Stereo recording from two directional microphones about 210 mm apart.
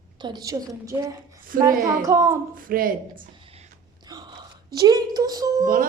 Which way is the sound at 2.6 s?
45° right (ahead or behind).